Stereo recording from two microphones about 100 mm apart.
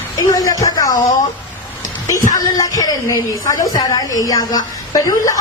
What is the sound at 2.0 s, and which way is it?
A woman's voice, 35° left (ahead or behind).